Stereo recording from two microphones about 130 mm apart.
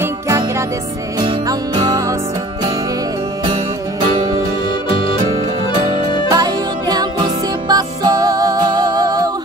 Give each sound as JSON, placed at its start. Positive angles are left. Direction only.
{"t": 0.0, "sound": "music", "side_deg": -20}
{"t": 1.2, "sound": "music", "side_deg": -35}
{"t": 6.3, "sound": "music", "side_deg": -30}